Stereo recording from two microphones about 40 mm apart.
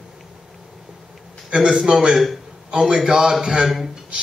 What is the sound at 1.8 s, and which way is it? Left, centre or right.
Speech, centre.